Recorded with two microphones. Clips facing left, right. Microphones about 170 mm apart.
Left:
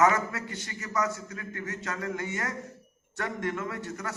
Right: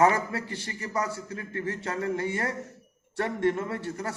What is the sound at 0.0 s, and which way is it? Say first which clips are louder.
A man's voice: right 1 dB; 30° right (ahead or behind).